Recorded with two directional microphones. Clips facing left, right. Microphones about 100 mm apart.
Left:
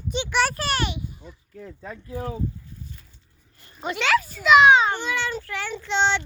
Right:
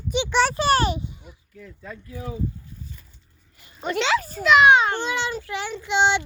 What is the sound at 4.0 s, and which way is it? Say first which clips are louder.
Speech: left 1 dB; 25° right (ahead or behind).